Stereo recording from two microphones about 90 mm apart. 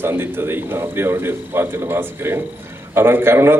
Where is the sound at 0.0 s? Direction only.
25° right (ahead or behind).